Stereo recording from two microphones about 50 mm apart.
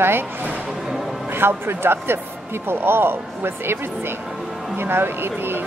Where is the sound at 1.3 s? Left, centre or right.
Right.